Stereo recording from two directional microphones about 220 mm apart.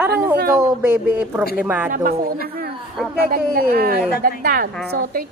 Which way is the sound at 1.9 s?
40° right (ahead or behind).